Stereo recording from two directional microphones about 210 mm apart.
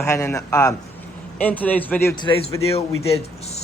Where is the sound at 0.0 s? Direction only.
15° left (ahead or behind).